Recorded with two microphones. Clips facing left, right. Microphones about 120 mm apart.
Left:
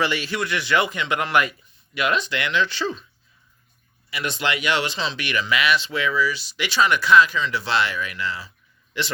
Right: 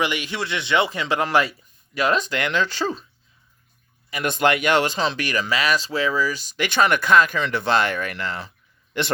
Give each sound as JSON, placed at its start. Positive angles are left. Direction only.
{"t": 0.0, "sound": "a man's voice", "side_deg": -15}
{"t": 4.1, "sound": "speech", "side_deg": -50}